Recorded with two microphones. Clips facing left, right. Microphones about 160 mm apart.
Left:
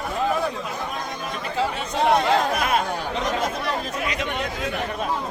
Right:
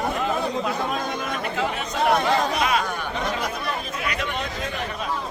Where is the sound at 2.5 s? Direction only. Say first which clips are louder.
Even; 55° left (ahead or behind).